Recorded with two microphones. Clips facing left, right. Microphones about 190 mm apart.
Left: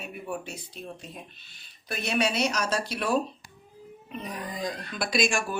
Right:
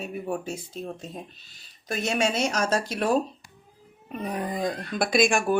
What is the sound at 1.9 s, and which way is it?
Speech, 45° right (ahead or behind).